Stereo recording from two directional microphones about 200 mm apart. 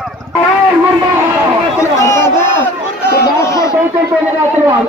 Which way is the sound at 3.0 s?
15° left (ahead or behind).